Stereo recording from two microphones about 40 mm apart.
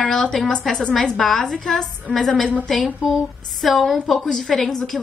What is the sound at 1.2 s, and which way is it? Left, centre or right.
A woman's voice, centre.